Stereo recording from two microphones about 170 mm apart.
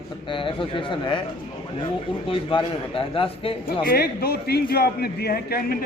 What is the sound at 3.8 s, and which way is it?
A man's voice, 60° left (ahead or behind).